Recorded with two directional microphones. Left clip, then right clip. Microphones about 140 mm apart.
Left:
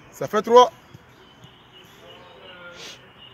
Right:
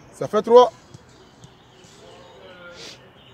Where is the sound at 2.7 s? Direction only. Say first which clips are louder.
Even; 20° right (ahead or behind).